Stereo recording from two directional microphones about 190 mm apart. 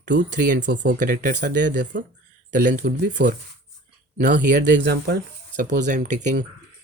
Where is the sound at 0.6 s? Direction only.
70° right (ahead or behind).